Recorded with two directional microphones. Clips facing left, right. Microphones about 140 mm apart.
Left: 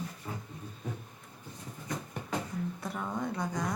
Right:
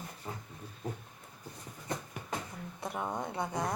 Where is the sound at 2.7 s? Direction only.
20° right (ahead or behind).